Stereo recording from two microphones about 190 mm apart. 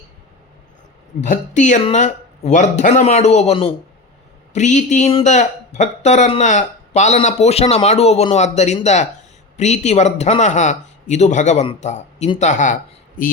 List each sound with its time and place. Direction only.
1.2 s speech: 40° left (ahead or behind)